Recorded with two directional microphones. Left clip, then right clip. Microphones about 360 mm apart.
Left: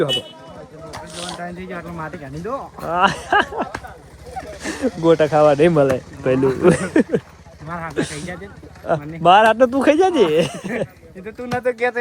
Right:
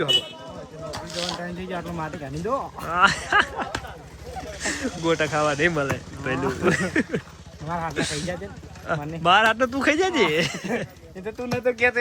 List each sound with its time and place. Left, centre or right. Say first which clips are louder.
1.1 s speech: right 2 dB; centre
1.7 s speech: left 1 dB; centre
4.4 s a sound: left 3 dB; centre
4.9 s speech: left 10 dB; centre
11.4 s speech: left 2 dB; left